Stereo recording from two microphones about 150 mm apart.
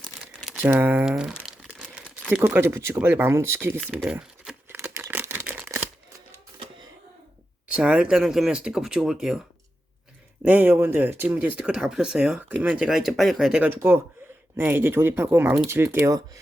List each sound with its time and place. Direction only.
0.0 s crumpling: 5° left (ahead or behind)
0.6 s speech: 10° right (ahead or behind)
3.9 s crumpling: 5° right (ahead or behind)
4.8 s a sound: 15° right (ahead or behind)
7.7 s speech: 5° right (ahead or behind)
10.4 s speech: 10° right (ahead or behind)